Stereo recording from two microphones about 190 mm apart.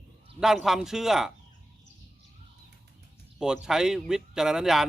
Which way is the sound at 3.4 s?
5° right (ahead or behind).